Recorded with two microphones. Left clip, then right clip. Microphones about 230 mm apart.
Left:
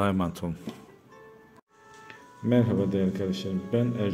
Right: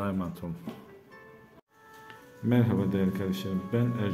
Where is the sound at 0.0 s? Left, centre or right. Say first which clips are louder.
Left 6 dB; left.